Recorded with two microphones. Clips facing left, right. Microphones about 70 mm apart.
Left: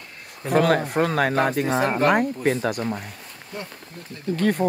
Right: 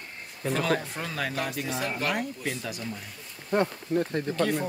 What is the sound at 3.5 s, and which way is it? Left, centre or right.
Speech, right.